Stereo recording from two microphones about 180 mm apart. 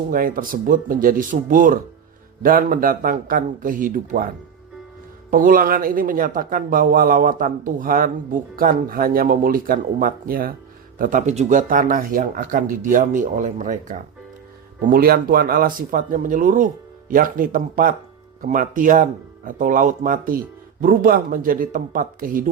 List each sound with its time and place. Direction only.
0.1 s a man's voice: 50° right (ahead or behind)
5.3 s a man's voice: 50° right (ahead or behind)
14.8 s a man's voice: 55° right (ahead or behind)